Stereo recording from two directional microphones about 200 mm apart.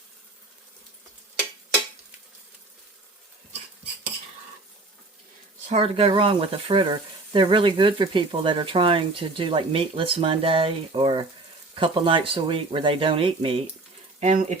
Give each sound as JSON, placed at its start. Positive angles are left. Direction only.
{"t": 5.6, "sound": "speech", "side_deg": -30}